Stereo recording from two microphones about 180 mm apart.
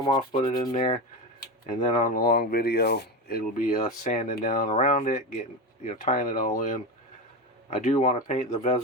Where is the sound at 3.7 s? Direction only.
45° left (ahead or behind).